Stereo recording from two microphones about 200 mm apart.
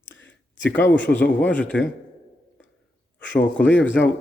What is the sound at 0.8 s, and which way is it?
Speech, 10° left (ahead or behind).